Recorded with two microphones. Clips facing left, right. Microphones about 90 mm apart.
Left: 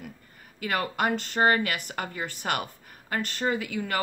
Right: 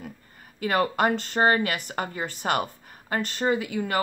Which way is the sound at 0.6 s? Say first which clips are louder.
Right 5 dB; 30° right (ahead or behind).